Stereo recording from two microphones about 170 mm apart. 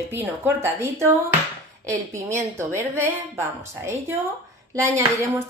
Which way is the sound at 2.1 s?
15° right (ahead or behind).